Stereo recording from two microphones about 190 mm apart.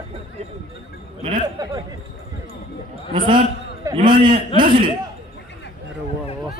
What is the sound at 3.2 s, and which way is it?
A man's voice, 25° right (ahead or behind).